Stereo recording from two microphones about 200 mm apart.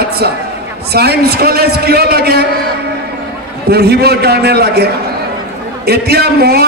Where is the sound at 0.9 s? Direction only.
55° right (ahead or behind).